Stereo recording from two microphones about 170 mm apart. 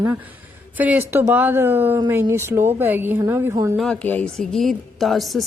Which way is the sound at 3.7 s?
5° left (ahead or behind).